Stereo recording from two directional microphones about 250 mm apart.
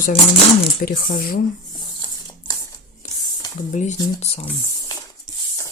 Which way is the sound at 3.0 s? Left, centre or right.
Left.